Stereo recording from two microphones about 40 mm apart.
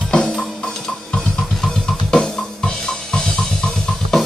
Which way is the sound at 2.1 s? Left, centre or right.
Centre.